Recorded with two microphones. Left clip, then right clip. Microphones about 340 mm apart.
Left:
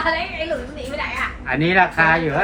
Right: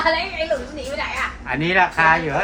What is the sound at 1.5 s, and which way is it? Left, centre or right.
Speech, centre.